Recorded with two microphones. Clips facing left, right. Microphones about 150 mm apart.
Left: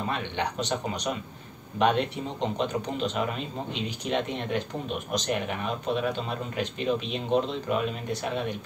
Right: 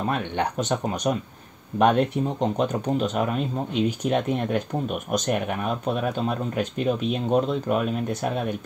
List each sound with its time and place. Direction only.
0.1 s speech: 50° right (ahead or behind)